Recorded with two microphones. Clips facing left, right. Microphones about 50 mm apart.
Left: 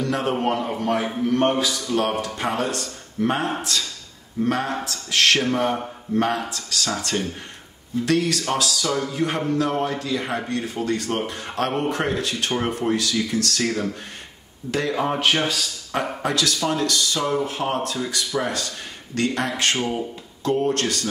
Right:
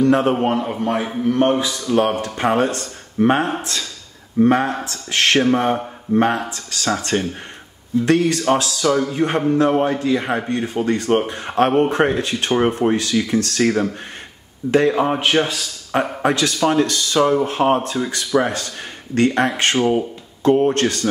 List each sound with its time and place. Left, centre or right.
0.0 s a man's voice: right
2.2 s a man's voice: right
15.0 s a man's voice: right
17.7 s a man's voice: right